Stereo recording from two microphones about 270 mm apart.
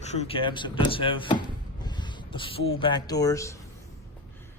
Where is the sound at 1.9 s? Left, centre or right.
Centre.